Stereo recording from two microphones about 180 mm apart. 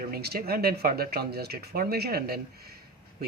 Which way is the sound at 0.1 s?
60° right (ahead or behind).